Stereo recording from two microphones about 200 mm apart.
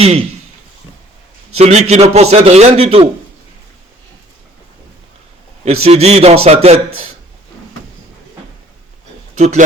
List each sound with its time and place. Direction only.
0.0 s a man's voice: 30° right (ahead or behind)
1.5 s a man's voice: 30° right (ahead or behind)
5.6 s a man's voice: 30° right (ahead or behind)